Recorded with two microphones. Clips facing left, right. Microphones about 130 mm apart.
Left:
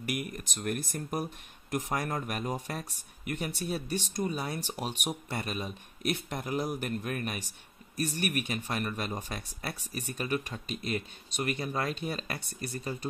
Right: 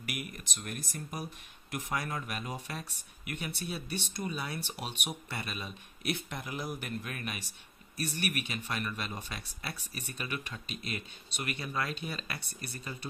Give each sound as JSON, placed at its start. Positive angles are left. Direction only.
{"t": 0.1, "sound": "speech", "side_deg": 40}
{"t": 1.7, "sound": "speech", "side_deg": 40}